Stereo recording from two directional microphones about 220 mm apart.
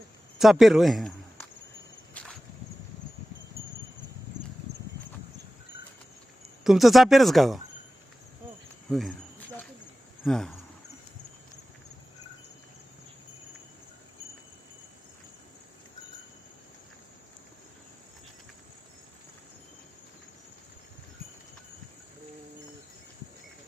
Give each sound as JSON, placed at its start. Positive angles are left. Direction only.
{"t": 0.3, "sound": "speech", "side_deg": 0}
{"t": 2.2, "sound": "whip", "side_deg": 5}
{"t": 6.4, "sound": "speech", "side_deg": 0}
{"t": 8.9, "sound": "speech", "side_deg": 0}
{"t": 10.2, "sound": "speech", "side_deg": 0}